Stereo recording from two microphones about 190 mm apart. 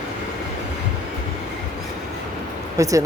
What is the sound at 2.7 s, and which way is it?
Speech, 15° right (ahead or behind).